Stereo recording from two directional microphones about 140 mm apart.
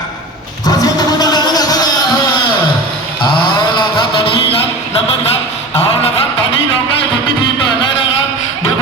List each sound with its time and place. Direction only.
0.6 s music: 25° left (ahead or behind)
3.2 s mantra: 35° left (ahead or behind)
6.0 s a sound: 40° left (ahead or behind)